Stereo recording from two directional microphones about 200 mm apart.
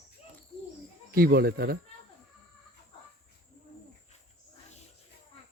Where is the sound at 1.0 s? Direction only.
50° right (ahead or behind).